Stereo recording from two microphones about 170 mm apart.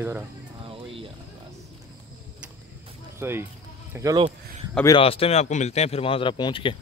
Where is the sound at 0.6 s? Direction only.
35° right (ahead or behind).